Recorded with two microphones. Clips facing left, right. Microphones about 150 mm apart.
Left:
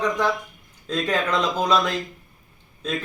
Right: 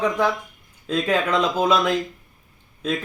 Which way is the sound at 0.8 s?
10° right (ahead or behind).